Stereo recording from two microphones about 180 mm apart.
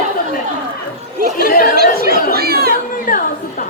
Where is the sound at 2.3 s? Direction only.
60° right (ahead or behind).